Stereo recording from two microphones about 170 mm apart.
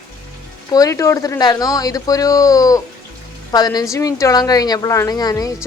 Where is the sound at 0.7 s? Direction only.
20° left (ahead or behind).